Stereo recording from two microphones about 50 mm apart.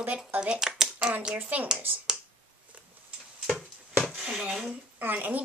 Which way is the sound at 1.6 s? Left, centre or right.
Centre.